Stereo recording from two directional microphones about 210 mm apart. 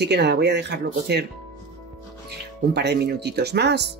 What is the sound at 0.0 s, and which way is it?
Speech, 50° right (ahead or behind).